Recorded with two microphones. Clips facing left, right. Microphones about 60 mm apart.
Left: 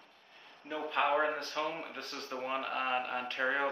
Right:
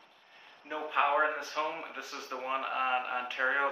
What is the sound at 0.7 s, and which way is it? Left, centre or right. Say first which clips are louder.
Speech: right 2 dB; centre.